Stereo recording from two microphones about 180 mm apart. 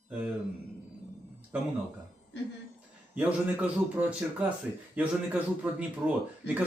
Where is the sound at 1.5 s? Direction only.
10° right (ahead or behind).